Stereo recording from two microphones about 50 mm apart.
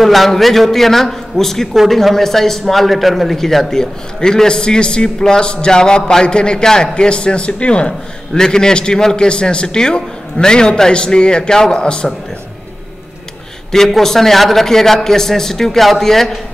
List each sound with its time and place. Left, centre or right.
0.0 s a man's voice: centre
13.7 s a man's voice: centre